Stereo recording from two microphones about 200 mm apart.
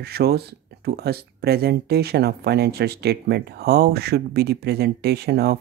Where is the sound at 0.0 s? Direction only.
50° right (ahead or behind).